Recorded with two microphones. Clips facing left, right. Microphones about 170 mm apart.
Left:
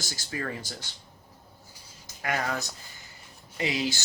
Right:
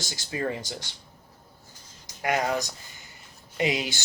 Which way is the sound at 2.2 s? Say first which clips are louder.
Right 4 dB; 20° right (ahead or behind).